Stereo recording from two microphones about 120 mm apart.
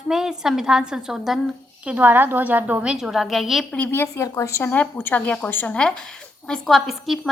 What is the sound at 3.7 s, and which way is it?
A woman's voice, 15° left (ahead or behind).